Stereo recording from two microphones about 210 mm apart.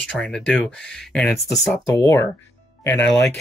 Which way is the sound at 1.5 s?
20° left (ahead or behind).